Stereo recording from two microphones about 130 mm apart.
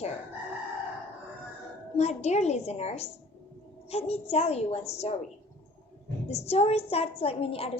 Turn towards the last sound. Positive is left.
turn(degrees=50)  # may be behind; listen again after turning